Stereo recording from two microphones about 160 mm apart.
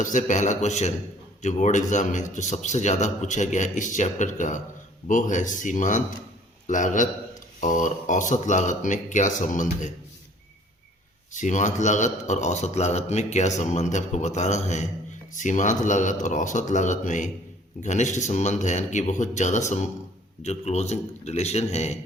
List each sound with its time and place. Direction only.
0.0 s a man's voice: 50° left (ahead or behind)
11.3 s a man's voice: 50° left (ahead or behind)